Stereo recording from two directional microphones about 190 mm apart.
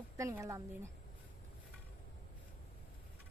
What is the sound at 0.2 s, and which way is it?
Speech, 15° right (ahead or behind).